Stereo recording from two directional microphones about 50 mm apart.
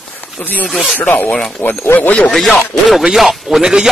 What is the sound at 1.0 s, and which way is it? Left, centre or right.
Speech, left.